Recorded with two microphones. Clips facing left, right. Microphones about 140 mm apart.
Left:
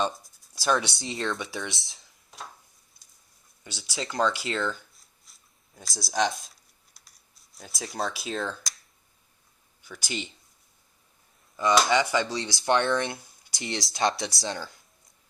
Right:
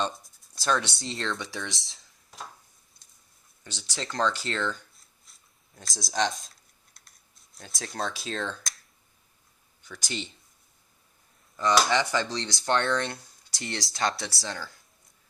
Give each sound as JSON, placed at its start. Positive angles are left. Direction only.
{"t": 0.1, "sound": "speech", "side_deg": 5}
{"t": 3.6, "sound": "rub", "side_deg": 10}
{"t": 9.8, "sound": "speech", "side_deg": 10}
{"t": 11.7, "sound": "speech", "side_deg": 5}